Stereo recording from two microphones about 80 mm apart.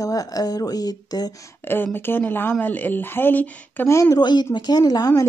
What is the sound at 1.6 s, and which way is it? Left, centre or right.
Speech, left.